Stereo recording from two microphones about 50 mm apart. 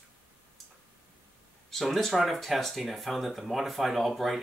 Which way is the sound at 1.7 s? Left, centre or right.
Centre.